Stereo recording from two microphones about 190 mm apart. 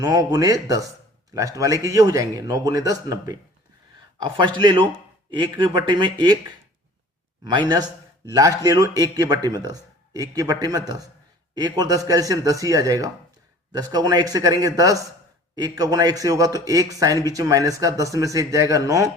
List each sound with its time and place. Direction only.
0.0 s a man's voice: 20° right (ahead or behind)
4.4 s a man's voice: 25° right (ahead or behind)
7.7 s a man's voice: 20° right (ahead or behind)